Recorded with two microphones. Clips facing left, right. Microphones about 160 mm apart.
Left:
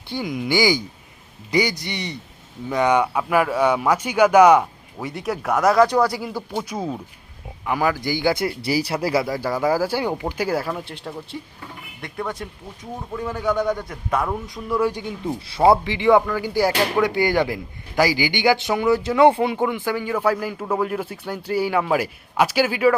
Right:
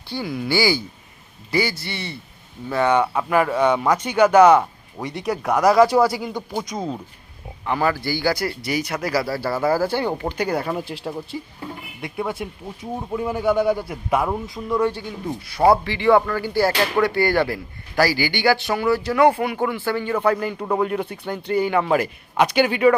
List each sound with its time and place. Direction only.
0.1 s a man's voice: 15° left (ahead or behind)
15.4 s a man's voice: 25° left (ahead or behind)
19.6 s speech: 15° left (ahead or behind)